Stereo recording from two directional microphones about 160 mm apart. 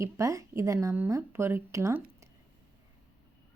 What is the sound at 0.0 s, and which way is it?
A woman's voice, 20° right (ahead or behind).